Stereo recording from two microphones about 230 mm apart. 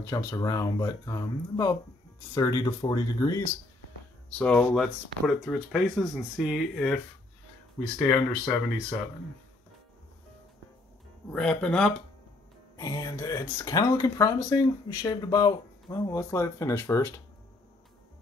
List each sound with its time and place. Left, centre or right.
0.0 s speech: centre
4.3 s speech: centre
8.0 s speech: centre
11.3 s speech: centre
12.7 s speech: centre